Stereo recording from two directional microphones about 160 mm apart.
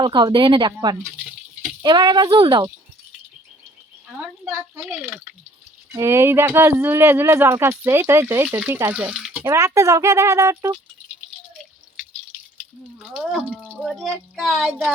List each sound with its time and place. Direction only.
0.0 s speech: 30° right (ahead or behind)
4.2 s speech: 10° right (ahead or behind)
5.9 s speech: 20° right (ahead or behind)
9.5 s speech: 20° right (ahead or behind)
13.0 s speech: 5° right (ahead or behind)
13.5 s speech: 10° left (ahead or behind)